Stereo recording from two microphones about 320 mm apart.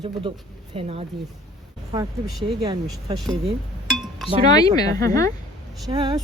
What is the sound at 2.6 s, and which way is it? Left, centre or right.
Speech, centre.